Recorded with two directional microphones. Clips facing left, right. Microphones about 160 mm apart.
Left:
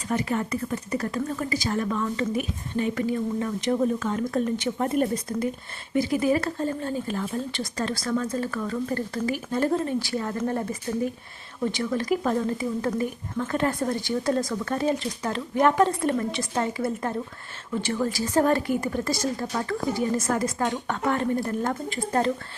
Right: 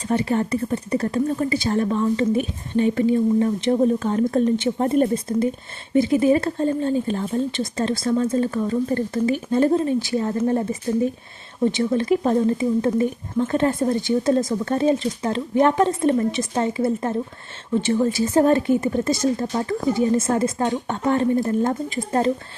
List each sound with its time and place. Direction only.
0.1 s speech: 30° right (ahead or behind)